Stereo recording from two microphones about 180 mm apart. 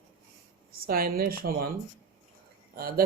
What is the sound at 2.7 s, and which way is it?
Speech, 55° right (ahead or behind).